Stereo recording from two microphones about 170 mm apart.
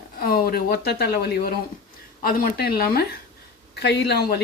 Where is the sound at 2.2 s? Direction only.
60° left (ahead or behind).